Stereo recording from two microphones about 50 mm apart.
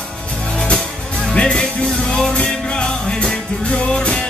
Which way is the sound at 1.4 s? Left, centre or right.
Left.